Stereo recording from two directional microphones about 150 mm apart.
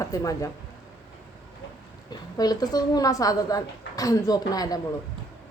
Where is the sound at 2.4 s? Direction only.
25° left (ahead or behind).